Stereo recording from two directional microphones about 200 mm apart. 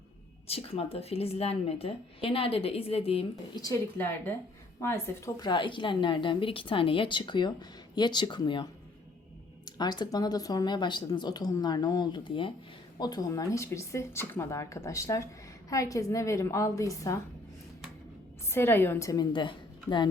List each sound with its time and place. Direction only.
0.4 s a woman's voice: 30° left (ahead or behind)
3.6 s a woman's voice: 15° left (ahead or behind)
9.6 s a woman's voice: 20° left (ahead or behind)
18.5 s speech: 10° left (ahead or behind)